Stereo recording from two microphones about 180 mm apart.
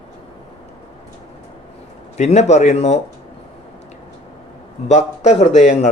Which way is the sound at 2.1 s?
40° left (ahead or behind).